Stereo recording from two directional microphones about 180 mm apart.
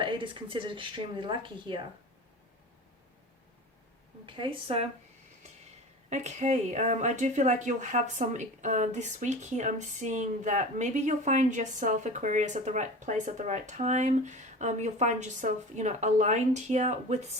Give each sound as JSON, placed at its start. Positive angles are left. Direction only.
{"t": 0.0, "sound": "speech", "side_deg": -25}
{"t": 4.3, "sound": "speech", "side_deg": -30}
{"t": 6.1, "sound": "speech", "side_deg": -40}